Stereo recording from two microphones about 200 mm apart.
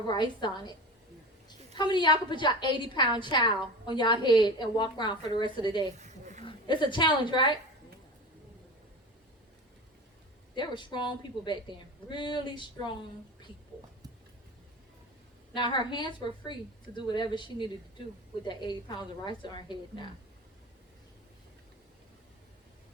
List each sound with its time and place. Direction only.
0.1 s a woman's voice: 20° left (ahead or behind)
6.0 s a sound: 35° right (ahead or behind)
6.4 s a woman's voice: 25° left (ahead or behind)
10.5 s a woman's voice: 20° left (ahead or behind)
15.5 s a woman's voice: 20° left (ahead or behind)